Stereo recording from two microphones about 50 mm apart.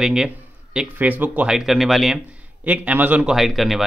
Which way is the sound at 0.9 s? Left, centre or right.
Right.